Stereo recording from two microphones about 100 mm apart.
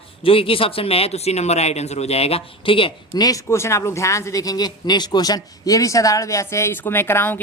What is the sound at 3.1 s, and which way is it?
Speech, 35° left (ahead or behind).